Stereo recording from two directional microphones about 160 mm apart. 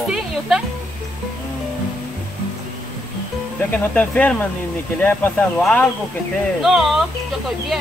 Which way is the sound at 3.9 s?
10° left (ahead or behind).